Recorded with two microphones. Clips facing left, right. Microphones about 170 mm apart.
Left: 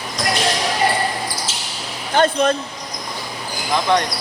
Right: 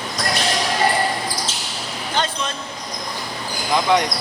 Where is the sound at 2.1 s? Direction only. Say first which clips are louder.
Left 9 dB; 55° left (ahead or behind).